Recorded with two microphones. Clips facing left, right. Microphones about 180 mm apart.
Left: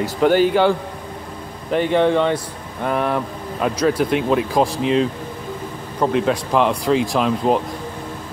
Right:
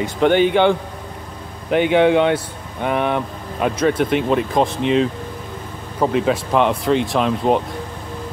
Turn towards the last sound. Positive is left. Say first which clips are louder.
# even
turn(degrees=0)  # may be behind; listen again after turning